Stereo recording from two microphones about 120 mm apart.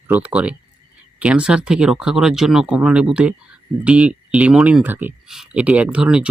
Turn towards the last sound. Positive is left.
turn(degrees=-10)  # may be behind; listen again after turning